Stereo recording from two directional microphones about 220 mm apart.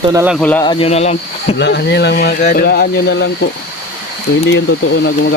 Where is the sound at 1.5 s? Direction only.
50° left (ahead or behind).